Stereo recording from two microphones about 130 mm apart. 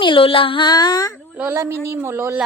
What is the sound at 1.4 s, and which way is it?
A woman's voice, 15° right (ahead or behind).